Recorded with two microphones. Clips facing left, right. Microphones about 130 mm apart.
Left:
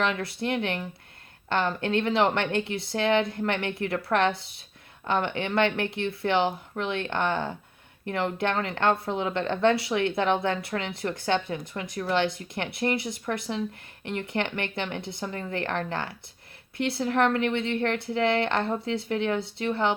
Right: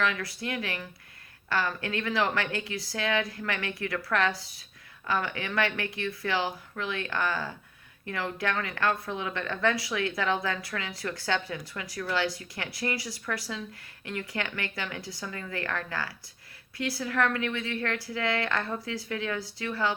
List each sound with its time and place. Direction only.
0.0 s speech: 25° left (ahead or behind)